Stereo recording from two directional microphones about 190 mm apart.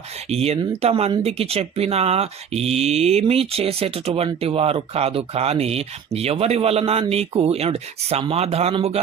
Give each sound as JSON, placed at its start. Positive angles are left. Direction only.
{"t": 0.3, "sound": "speech", "side_deg": -35}